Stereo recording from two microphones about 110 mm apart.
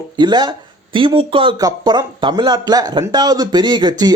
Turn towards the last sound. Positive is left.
turn(degrees=-40)  # may be behind; listen again after turning